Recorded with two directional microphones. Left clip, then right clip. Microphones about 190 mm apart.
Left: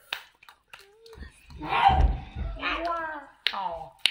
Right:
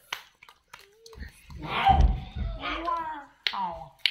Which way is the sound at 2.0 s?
15° left (ahead or behind).